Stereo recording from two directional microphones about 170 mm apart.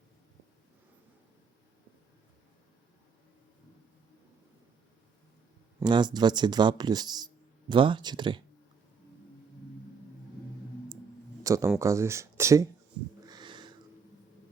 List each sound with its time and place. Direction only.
5.8 s speech: 25° right (ahead or behind)
11.4 s speech: 20° right (ahead or behind)
13.2 s sniff: 25° right (ahead or behind)